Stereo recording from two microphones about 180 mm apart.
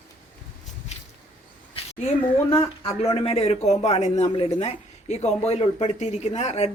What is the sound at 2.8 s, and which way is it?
A man's voice, 30° left (ahead or behind).